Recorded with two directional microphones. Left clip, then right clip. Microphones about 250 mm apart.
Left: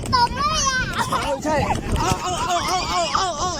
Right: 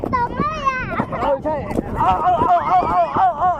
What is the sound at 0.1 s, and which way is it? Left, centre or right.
Children playing, left.